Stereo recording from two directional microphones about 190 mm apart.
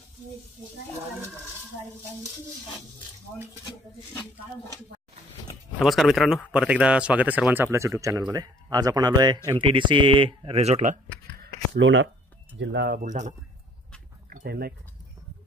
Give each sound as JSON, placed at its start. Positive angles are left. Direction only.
{"t": 5.8, "sound": "speech", "side_deg": 0}
{"t": 11.4, "sound": "speech", "side_deg": -65}
{"t": 12.5, "sound": "speech", "side_deg": -60}
{"t": 14.3, "sound": "speech", "side_deg": -50}